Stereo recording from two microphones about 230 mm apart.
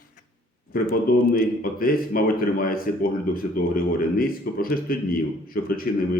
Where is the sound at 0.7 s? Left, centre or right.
Left.